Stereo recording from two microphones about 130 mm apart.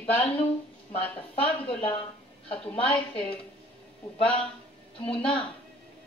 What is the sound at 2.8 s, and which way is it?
Speech, 45° left (ahead or behind).